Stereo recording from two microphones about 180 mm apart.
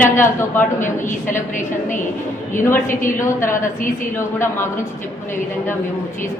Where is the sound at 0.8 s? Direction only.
45° left (ahead or behind).